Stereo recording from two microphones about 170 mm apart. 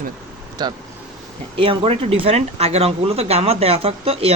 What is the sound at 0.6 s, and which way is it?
Speech, 25° right (ahead or behind).